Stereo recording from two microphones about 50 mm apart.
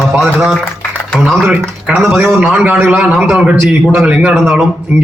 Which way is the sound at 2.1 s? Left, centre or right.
Right.